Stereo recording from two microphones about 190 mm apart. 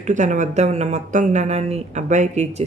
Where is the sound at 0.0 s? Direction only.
40° right (ahead or behind).